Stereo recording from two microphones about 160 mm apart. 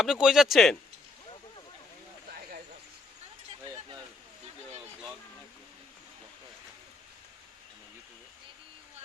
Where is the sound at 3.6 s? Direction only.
30° right (ahead or behind).